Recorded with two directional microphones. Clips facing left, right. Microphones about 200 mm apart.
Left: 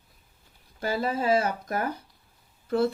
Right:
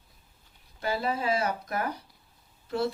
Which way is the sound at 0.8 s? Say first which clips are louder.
Left 2 dB; 50° left (ahead or behind).